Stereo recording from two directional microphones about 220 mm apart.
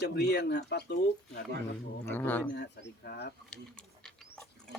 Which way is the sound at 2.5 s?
50° left (ahead or behind).